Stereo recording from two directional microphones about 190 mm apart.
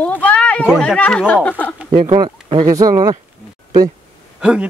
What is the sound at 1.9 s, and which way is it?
Speech, 40° right (ahead or behind).